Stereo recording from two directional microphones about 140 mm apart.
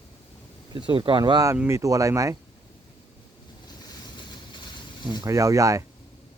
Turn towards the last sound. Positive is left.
turn(degrees=-25)  # may be behind; listen again after turning